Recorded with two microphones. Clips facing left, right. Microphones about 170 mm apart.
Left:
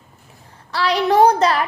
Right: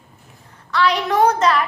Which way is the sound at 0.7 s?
35° left (ahead or behind).